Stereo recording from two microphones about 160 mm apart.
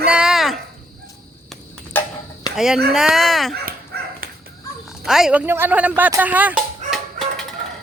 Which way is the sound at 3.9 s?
80° right.